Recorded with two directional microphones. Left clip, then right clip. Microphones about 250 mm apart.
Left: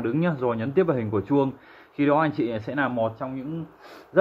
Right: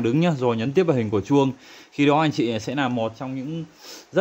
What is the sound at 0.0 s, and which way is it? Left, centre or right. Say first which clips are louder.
Speech: right 3 dB; right.